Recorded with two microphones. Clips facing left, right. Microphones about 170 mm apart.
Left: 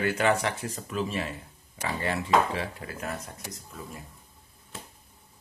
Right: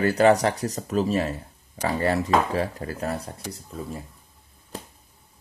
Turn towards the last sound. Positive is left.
turn(degrees=-40)  # may be behind; listen again after turning